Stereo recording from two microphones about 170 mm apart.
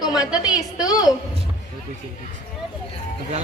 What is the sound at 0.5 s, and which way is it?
Speech, 20° left (ahead or behind).